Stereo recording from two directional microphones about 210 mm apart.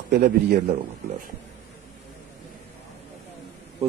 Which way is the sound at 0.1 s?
45° right (ahead or behind).